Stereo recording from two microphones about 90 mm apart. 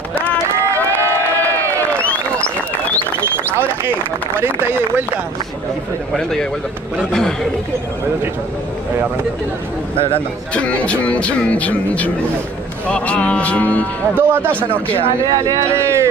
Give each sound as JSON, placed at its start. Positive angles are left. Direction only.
{"t": 0.7, "sound": "run", "side_deg": 20}
{"t": 3.2, "sound": "a sound", "side_deg": -25}
{"t": 4.4, "sound": "speech", "side_deg": -25}
{"t": 7.1, "sound": "speech", "side_deg": 5}
{"t": 10.5, "sound": "speech", "side_deg": 15}
{"t": 14.2, "sound": "speech", "side_deg": -20}
{"t": 15.2, "sound": "speech", "side_deg": -45}
{"t": 15.7, "sound": "speech", "side_deg": -30}